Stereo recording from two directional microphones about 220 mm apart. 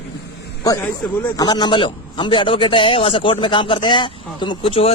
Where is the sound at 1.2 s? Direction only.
15° left (ahead or behind).